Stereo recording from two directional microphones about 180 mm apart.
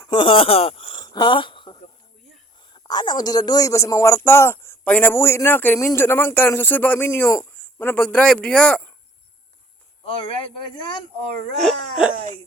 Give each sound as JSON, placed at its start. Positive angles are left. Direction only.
{"t": 0.0, "sound": "a sound", "side_deg": 25}
{"t": 2.7, "sound": "speech", "side_deg": 25}
{"t": 10.2, "sound": "speech", "side_deg": 30}
{"t": 11.6, "sound": "wail", "side_deg": 0}